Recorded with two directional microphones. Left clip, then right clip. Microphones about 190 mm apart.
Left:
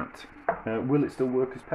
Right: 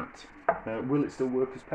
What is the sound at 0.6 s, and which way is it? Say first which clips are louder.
Chopping: left 3 dB; 50° left (ahead or behind).